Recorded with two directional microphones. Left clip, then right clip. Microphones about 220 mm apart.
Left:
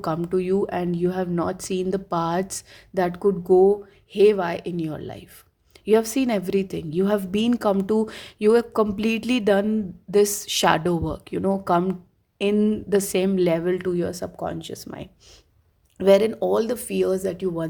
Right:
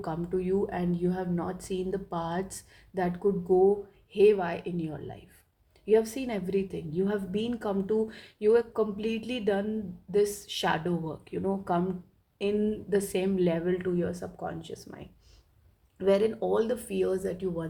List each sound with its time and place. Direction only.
0.0 s a woman's voice: 50° left (ahead or behind)